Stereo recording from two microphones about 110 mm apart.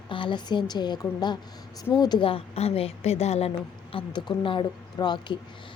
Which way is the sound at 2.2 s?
60° left (ahead or behind).